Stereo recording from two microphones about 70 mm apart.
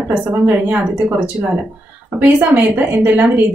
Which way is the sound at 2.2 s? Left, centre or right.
Right.